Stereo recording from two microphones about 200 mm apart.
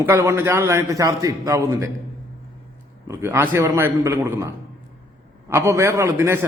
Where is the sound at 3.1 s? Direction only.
10° right (ahead or behind).